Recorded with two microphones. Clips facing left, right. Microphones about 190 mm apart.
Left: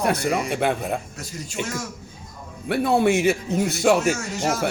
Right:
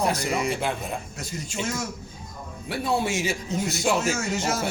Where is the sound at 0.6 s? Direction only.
60° left (ahead or behind).